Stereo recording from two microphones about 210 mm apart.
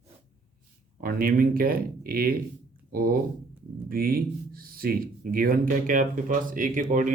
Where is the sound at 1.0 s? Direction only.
45° right (ahead or behind).